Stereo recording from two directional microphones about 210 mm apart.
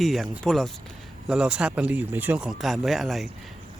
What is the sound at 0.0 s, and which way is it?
Speech, centre (ahead or behind).